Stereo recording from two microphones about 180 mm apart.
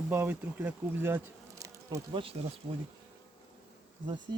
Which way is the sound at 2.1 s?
30° right (ahead or behind).